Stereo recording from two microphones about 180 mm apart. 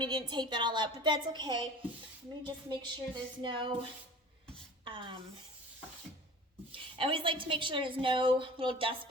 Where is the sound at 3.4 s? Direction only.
25° right (ahead or behind).